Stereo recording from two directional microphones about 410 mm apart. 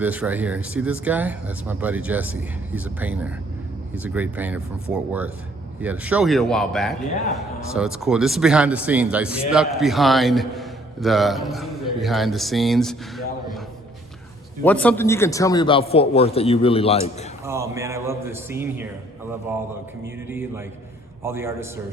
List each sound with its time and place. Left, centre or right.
0.0 s a man's voice: centre
5.8 s a man's voice: centre
14.6 s a man's voice: centre
17.4 s speech: centre
20.2 s a man's voice: centre